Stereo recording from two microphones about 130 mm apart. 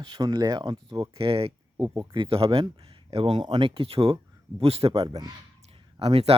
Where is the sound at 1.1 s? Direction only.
45° right (ahead or behind).